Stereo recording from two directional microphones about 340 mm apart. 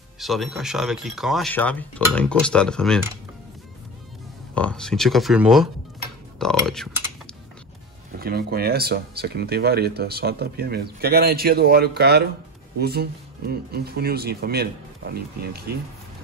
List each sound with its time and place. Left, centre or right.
0.2 s speech: centre
4.6 s speech: centre
8.2 s speech: right